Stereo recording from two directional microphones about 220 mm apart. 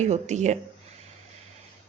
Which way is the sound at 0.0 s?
30° right (ahead or behind).